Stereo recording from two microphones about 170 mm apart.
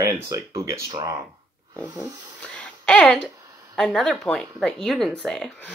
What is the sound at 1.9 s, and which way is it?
Speech, 15° right (ahead or behind).